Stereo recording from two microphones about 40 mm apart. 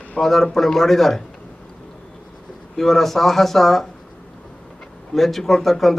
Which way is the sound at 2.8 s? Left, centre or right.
Centre.